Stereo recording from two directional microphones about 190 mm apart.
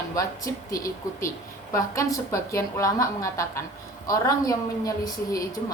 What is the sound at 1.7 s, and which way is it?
A woman's voice, 15° left (ahead or behind).